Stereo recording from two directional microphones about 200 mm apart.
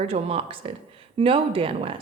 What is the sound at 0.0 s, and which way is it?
A woman's voice, 30° right (ahead or behind).